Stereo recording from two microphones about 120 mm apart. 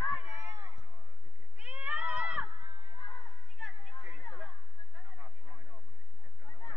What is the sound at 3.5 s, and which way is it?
Chatter, centre (ahead or behind).